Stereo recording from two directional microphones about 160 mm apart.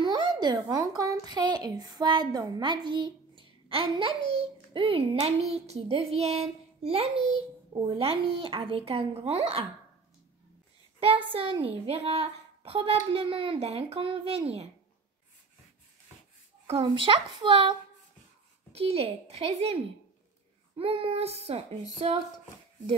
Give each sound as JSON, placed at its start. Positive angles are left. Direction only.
{"t": 0.4, "sound": "a woman's voice", "side_deg": -25}
{"t": 11.0, "sound": "a woman's voice", "side_deg": -35}
{"t": 16.6, "sound": "a woman's voice", "side_deg": -35}